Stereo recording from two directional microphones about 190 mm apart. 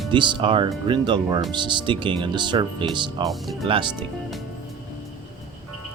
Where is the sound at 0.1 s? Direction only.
25° right (ahead or behind).